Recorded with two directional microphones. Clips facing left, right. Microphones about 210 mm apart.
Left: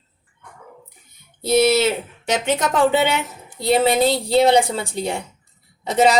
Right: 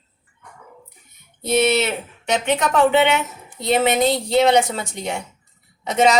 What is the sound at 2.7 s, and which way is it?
Speech, 35° left (ahead or behind).